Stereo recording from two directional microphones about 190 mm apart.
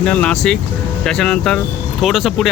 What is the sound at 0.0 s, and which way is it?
Speech, 5° left (ahead or behind).